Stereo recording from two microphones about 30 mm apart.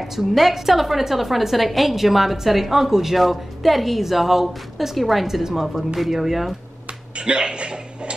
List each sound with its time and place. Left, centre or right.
0.0 s a woman's voice: centre
7.2 s speech: right